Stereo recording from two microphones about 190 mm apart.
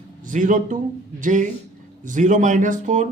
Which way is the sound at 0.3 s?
45° right (ahead or behind).